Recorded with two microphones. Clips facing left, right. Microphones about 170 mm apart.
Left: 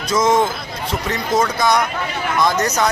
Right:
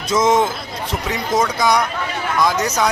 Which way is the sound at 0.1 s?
20° right (ahead or behind).